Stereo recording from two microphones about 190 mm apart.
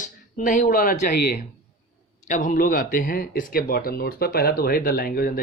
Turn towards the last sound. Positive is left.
turn(degrees=50)  # may be behind; listen again after turning